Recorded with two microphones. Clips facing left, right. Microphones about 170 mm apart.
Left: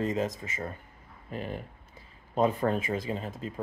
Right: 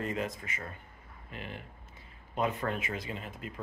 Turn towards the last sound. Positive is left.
turn(degrees=35)  # may be behind; listen again after turning